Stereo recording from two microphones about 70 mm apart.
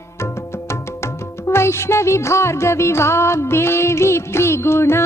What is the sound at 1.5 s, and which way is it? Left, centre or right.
Music, left.